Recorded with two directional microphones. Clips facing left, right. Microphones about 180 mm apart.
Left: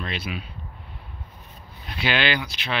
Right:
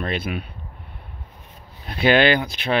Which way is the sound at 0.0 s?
50° right (ahead or behind).